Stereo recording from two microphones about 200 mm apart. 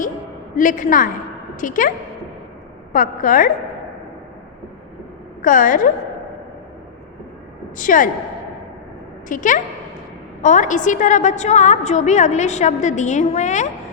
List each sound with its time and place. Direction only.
0.5 s a woman's voice: 40° left (ahead or behind)
2.9 s a woman's voice: 40° left (ahead or behind)
5.4 s a woman's voice: 40° left (ahead or behind)
7.8 s a woman's voice: 40° left (ahead or behind)
9.3 s a woman's voice: 40° left (ahead or behind)